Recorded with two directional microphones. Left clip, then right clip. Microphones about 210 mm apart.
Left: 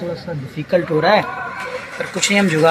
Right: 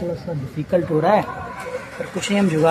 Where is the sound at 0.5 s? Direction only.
10° right (ahead or behind).